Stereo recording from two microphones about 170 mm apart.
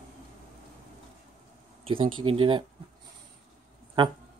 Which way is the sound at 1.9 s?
30° right (ahead or behind).